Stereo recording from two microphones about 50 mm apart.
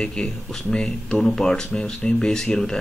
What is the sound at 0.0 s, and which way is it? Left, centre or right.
A man's voice, centre.